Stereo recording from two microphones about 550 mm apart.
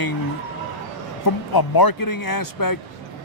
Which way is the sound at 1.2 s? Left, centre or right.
Left.